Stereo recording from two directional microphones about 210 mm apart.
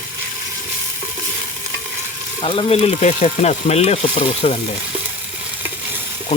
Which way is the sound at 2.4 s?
25° left (ahead or behind).